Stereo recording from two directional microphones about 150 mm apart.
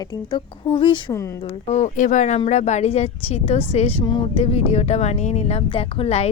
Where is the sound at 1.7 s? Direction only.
55° left (ahead or behind).